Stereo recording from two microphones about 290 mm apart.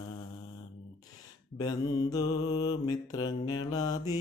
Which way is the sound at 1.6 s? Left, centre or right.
Centre.